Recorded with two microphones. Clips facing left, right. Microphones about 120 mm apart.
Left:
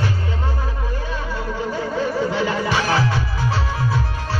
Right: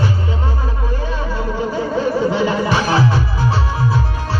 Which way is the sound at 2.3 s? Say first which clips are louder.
Right 4 dB; 20° right (ahead or behind).